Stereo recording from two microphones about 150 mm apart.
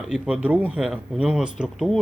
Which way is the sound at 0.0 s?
5° right (ahead or behind).